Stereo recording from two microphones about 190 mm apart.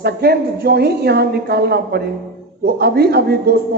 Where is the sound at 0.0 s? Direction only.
55° right (ahead or behind).